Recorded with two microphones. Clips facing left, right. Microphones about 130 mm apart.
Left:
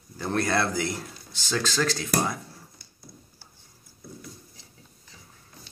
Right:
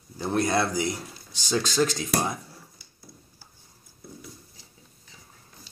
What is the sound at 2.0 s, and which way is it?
Speech, centre (ahead or behind).